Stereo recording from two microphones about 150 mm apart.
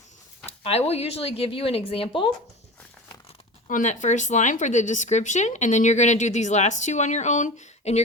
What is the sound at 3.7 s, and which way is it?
Speech, 55° left (ahead or behind).